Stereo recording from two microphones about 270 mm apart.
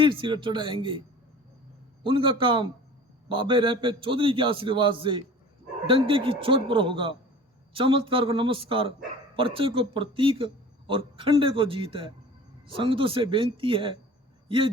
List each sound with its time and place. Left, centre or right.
0.0 s speech: centre
2.0 s a man's voice: centre